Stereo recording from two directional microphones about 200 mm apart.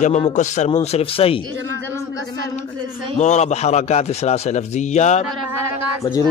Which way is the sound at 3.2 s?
35° left (ahead or behind).